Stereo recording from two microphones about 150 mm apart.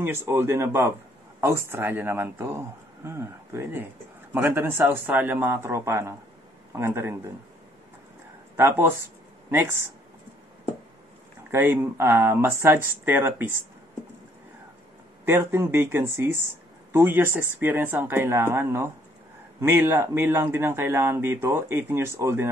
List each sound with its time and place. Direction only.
0.0 s a man's voice: 15° right (ahead or behind)
8.5 s a man's voice: 15° right (ahead or behind)
11.5 s a man's voice: 15° right (ahead or behind)
15.2 s a man's voice: 15° right (ahead or behind)